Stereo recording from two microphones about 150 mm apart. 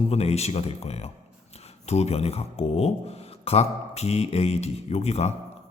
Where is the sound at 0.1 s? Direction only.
45° left (ahead or behind).